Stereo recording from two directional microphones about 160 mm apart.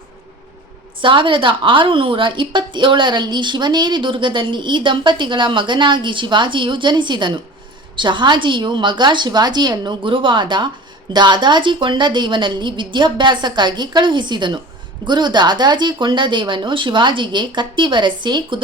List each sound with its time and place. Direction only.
1.0 s a woman's voice: 30° right (ahead or behind)